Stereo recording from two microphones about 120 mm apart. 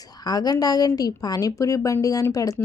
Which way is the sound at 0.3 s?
35° left (ahead or behind).